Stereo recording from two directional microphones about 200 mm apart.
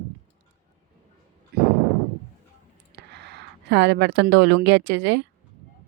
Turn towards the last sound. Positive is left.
turn(degrees=-60)  # may be behind; listen again after turning